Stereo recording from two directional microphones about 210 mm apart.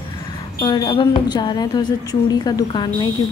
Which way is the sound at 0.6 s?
20° left (ahead or behind).